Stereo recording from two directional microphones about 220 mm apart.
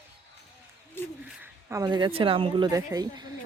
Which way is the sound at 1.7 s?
20° right (ahead or behind).